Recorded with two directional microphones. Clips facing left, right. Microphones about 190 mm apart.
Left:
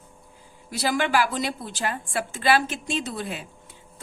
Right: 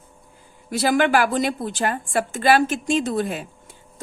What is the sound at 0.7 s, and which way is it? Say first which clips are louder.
A woman's voice: right 5 dB; 55° right (ahead or behind).